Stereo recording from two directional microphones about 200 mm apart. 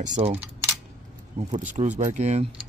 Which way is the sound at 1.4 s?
35° right (ahead or behind).